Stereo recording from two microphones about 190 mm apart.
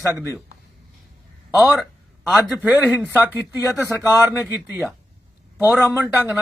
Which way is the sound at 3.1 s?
10° right (ahead or behind).